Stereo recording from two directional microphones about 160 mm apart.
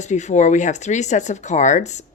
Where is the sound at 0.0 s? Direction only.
45° left (ahead or behind).